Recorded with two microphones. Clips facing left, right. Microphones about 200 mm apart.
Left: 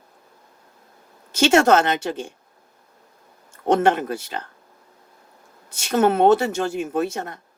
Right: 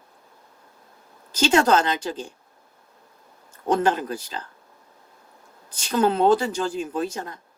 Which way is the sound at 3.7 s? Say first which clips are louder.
Left 3 dB; 65° left (ahead or behind).